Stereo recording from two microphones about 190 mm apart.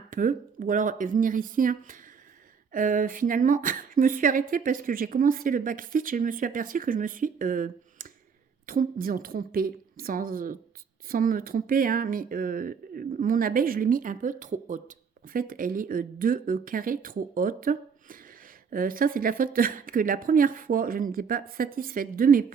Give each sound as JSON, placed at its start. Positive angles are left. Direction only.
{"t": 0.1, "sound": "speech", "side_deg": -45}